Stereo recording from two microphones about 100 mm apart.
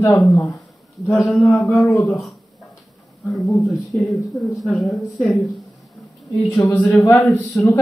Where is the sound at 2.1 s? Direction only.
Centre (ahead or behind).